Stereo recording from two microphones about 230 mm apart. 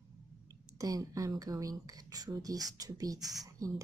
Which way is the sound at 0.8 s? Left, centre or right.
Centre.